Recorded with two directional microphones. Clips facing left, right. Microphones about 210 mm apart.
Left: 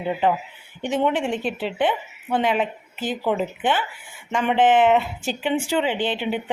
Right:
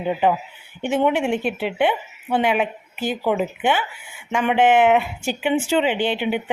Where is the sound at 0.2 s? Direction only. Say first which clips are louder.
Right 2 dB; 10° right (ahead or behind).